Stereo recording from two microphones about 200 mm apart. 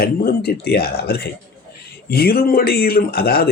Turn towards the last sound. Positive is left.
turn(degrees=50)  # may be behind; listen again after turning